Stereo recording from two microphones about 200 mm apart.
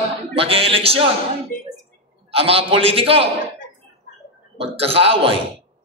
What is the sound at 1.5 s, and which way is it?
Speech, 45° left (ahead or behind).